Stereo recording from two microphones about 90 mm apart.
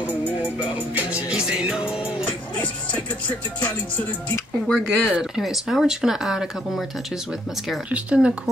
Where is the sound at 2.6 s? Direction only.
20° left (ahead or behind).